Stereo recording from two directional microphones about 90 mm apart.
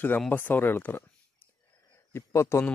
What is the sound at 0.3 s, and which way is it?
Speech, 20° left (ahead or behind).